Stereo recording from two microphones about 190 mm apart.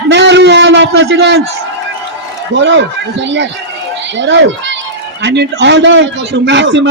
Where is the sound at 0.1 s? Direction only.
70° right (ahead or behind).